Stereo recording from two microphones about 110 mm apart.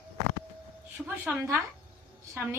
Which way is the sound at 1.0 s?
10° right (ahead or behind).